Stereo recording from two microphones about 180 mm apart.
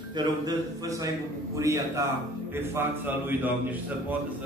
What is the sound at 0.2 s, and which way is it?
A man's voice, 20° right (ahead or behind).